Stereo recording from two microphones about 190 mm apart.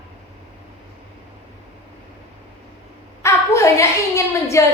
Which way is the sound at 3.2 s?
15° left (ahead or behind).